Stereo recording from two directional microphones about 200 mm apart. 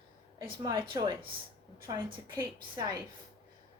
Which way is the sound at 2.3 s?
20° right (ahead or behind).